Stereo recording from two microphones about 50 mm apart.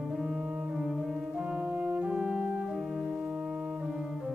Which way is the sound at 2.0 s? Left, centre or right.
Centre.